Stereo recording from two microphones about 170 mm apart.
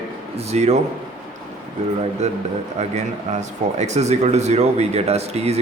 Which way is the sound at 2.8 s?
40° right (ahead or behind).